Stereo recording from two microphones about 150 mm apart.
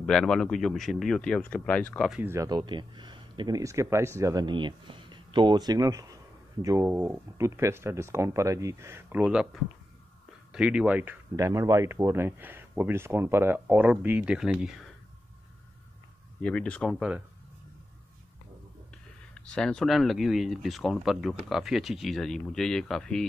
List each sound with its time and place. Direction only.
0.0 s speech: 5° left (ahead or behind)
2.1 s speech: 15° right (ahead or behind)
6.9 s speech: 15° right (ahead or behind)
11.3 s speech: 20° right (ahead or behind); by 14.9 s 5° right (ahead or behind)
16.3 s speech: 5° left (ahead or behind)
19.3 s speech: 5° left (ahead or behind)